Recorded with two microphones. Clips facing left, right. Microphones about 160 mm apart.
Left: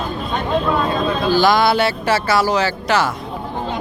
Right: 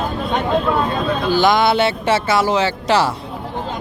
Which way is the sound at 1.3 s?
20° right (ahead or behind).